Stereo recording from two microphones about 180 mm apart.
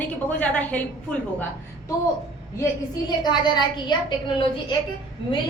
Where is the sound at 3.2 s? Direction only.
25° left (ahead or behind).